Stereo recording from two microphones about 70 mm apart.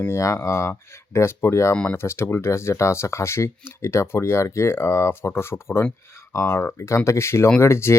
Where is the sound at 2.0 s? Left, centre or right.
Left.